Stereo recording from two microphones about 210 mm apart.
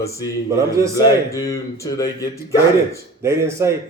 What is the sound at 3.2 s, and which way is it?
Speech, 15° right (ahead or behind).